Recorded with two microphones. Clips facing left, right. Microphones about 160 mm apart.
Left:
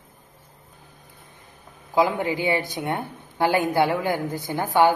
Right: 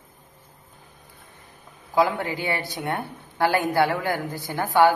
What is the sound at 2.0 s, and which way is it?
Speech, 20° left (ahead or behind).